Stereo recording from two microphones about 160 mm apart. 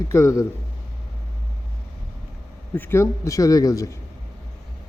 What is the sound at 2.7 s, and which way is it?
Speech, 15° left (ahead or behind).